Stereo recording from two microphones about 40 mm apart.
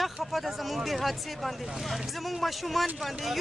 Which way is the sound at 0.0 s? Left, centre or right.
Centre.